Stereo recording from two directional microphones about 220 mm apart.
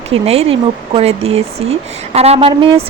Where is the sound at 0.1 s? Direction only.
25° right (ahead or behind).